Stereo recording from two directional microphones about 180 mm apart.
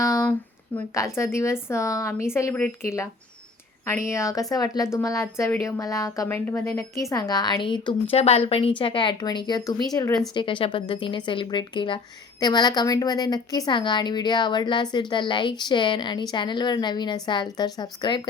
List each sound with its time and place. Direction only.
0.0 s a sound: 15° left (ahead or behind)
0.8 s a woman's voice: 15° left (ahead or behind)
10.3 s a woman's voice: 30° left (ahead or behind)